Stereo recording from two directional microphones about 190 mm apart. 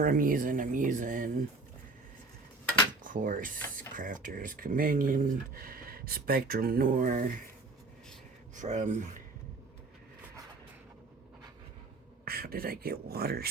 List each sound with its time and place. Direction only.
0.0 s speech: 45° right (ahead or behind)
3.0 s speech: 45° right (ahead or behind)
8.5 s speech: 40° right (ahead or behind)
12.2 s speech: 50° right (ahead or behind)